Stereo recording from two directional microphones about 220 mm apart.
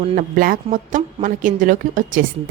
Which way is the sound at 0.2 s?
40° right (ahead or behind).